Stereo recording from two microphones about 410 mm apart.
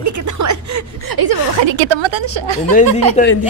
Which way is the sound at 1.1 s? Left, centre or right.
Right.